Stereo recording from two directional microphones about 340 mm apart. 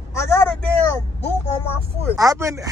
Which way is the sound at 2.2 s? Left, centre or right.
Centre.